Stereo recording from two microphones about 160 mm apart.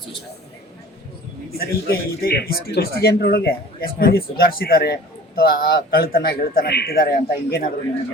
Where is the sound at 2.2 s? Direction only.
70° left (ahead or behind).